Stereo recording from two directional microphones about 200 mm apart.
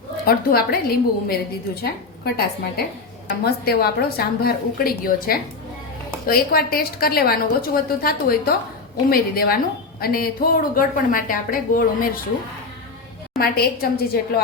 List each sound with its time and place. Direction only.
0.3 s a woman's voice: 50° left (ahead or behind)
13.4 s a woman's voice: 50° left (ahead or behind)